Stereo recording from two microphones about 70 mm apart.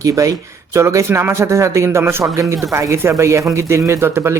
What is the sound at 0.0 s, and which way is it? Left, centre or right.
Speech, right.